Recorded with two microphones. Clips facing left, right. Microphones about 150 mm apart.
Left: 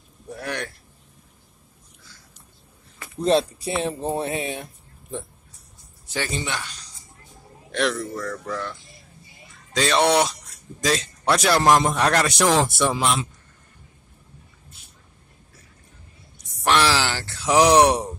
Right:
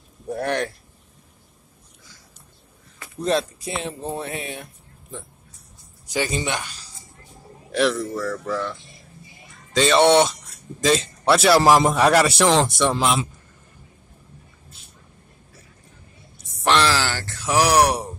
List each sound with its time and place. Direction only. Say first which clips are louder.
0.3 s speech: right 7 dB; 50° right (ahead or behind)
3.3 s speech: left 3 dB; 30° left (ahead or behind)
6.0 s speech: right 4 dB; 15° right (ahead or behind)
7.7 s speech: right 3 dB; centre (ahead or behind)
16.3 s a sound: right 1 dB; 5° left (ahead or behind)
16.9 s a sound: even; 15° left (ahead or behind)